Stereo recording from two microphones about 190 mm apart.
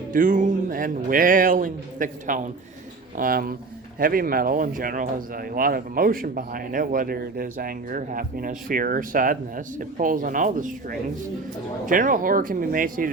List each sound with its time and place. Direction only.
0.1 s speech: 45° right (ahead or behind)